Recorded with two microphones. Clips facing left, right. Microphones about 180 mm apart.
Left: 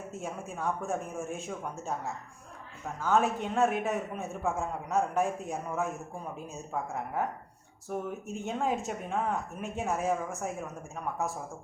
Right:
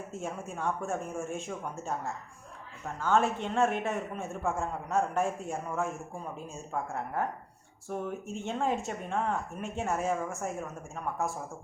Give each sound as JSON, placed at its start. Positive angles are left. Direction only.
{"t": 0.2, "sound": "speech", "side_deg": 0}
{"t": 6.9, "sound": "speech", "side_deg": 10}